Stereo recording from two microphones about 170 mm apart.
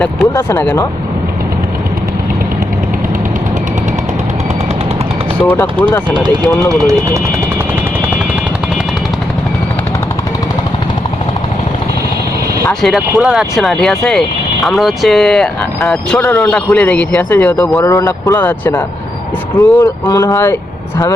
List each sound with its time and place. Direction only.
0.3 s speech: 15° left (ahead or behind)
5.4 s speech: 10° left (ahead or behind)
6.1 s speech: 25° right (ahead or behind)
12.8 s speech: centre (ahead or behind)
19.5 s speech: 20° left (ahead or behind)